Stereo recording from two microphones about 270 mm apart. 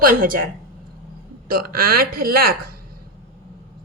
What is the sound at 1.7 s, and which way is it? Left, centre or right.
Speech, right.